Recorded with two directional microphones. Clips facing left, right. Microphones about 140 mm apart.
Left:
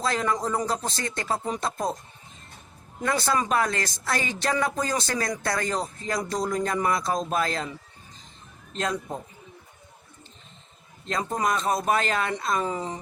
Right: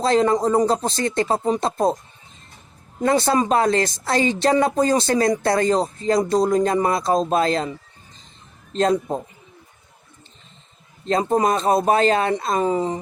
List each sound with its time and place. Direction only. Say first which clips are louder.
0.0 s speech: right 9 dB; 25° right (ahead or behind)
3.0 s speech: right 7 dB; 25° right (ahead or behind)
8.7 s speech: right 10 dB; 30° right (ahead or behind)
11.1 s speech: right 8 dB; 30° right (ahead or behind)